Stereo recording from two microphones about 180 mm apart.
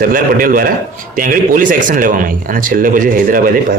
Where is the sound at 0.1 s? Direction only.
50° right (ahead or behind).